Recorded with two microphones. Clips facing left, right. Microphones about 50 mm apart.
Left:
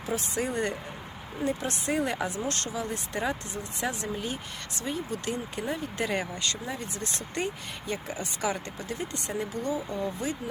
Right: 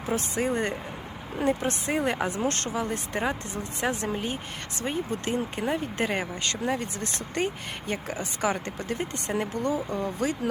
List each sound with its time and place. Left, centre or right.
0.0 s speech: right